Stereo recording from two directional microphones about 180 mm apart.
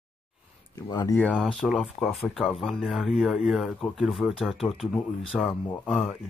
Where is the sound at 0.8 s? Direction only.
20° left (ahead or behind).